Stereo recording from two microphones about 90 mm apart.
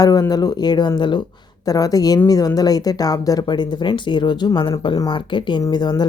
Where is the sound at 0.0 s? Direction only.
45° left (ahead or behind).